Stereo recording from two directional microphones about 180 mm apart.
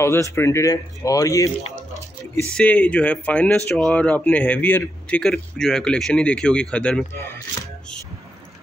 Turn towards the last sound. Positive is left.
turn(degrees=10)  # may be behind; listen again after turning